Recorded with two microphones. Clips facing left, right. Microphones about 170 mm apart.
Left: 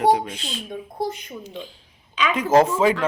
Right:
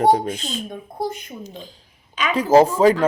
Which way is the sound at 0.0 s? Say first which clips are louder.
Right 2 dB; 45° right (ahead or behind).